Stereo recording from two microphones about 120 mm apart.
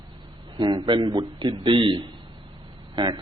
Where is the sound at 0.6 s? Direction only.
40° right (ahead or behind).